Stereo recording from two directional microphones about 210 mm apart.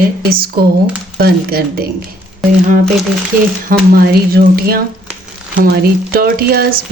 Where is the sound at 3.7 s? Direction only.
40° right (ahead or behind).